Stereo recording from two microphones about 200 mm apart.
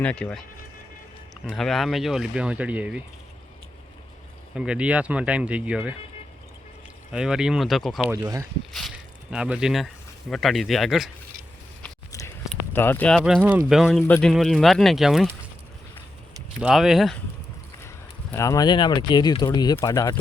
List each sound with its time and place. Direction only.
0.0 s speech: 5° left (ahead or behind)
1.5 s speech: centre (ahead or behind)
4.5 s speech: 5° right (ahead or behind)
7.1 s speech: 5° right (ahead or behind)
8.1 s speech: 15° right (ahead or behind)
11.8 s a sound: 15° left (ahead or behind)
12.5 s speech: 10° left (ahead or behind)
16.6 s speech: 5° right (ahead or behind)
17.8 s speech: 15° left (ahead or behind)